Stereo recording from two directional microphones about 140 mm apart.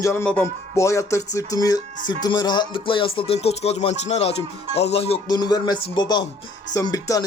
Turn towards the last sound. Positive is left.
turn(degrees=25)  # may be behind; listen again after turning